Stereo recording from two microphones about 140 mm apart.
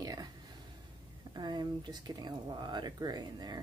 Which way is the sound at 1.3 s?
30° right (ahead or behind).